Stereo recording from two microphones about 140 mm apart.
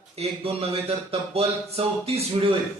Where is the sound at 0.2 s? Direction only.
45° right (ahead or behind).